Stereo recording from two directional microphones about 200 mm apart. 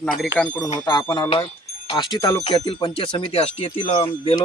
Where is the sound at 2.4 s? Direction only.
30° left (ahead or behind).